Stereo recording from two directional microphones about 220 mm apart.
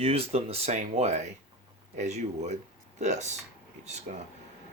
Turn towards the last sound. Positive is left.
turn(degrees=-30)  # may be behind; listen again after turning